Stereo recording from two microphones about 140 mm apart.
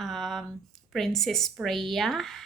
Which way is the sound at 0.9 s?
Centre (ahead or behind).